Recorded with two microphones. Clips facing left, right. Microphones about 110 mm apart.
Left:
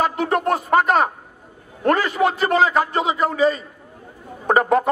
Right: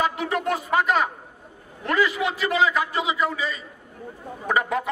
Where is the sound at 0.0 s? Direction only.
40° left (ahead or behind).